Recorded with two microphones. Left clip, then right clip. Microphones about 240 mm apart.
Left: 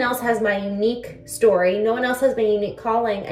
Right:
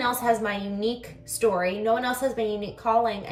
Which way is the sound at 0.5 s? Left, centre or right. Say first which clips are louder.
Left 7 dB; right.